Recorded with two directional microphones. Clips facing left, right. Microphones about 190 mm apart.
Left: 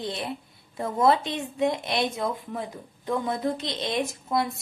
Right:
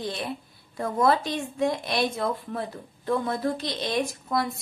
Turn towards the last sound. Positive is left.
turn(degrees=25)  # may be behind; listen again after turning